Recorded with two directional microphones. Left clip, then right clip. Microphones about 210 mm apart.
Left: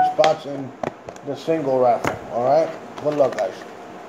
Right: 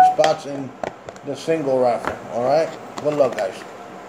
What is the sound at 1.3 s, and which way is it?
Speech, 10° right (ahead or behind).